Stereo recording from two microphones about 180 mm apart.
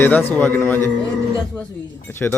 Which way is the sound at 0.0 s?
10° left (ahead or behind).